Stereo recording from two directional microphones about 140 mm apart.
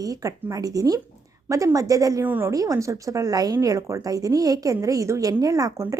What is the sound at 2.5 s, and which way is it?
Speech, 25° right (ahead or behind).